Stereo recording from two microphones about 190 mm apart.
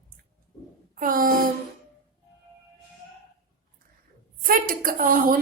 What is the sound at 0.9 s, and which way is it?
Speech, 45° right (ahead or behind).